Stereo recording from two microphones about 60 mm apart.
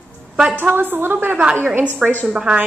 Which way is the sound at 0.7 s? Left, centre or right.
Right.